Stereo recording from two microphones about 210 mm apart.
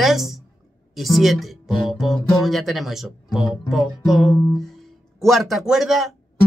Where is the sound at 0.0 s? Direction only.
Centre (ahead or behind).